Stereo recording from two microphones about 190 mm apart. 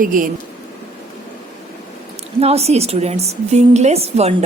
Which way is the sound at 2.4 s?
35° right (ahead or behind).